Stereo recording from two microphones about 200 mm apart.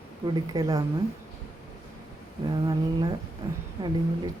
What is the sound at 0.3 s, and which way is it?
Speech, 20° right (ahead or behind).